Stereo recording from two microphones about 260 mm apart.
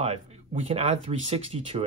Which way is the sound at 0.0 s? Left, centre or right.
Right.